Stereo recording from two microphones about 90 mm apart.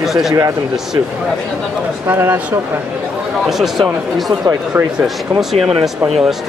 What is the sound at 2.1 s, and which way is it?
Speech, 25° right (ahead or behind).